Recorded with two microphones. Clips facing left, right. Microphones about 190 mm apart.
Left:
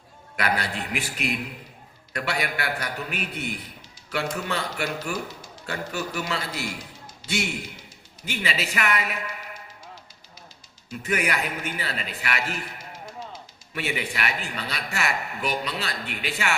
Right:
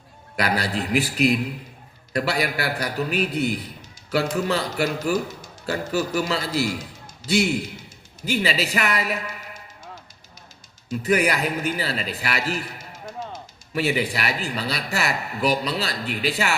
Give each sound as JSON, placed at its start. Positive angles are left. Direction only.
{"t": 0.3, "sound": "a man's voice", "side_deg": -35}
{"t": 10.8, "sound": "speech", "side_deg": -35}